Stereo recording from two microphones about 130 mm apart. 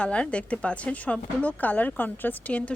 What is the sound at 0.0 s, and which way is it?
A woman's voice, 10° left (ahead or behind).